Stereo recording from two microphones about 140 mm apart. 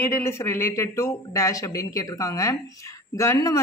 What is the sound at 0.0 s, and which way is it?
Speech, 20° left (ahead or behind).